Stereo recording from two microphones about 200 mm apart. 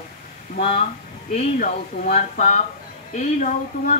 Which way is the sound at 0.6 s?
30° left (ahead or behind).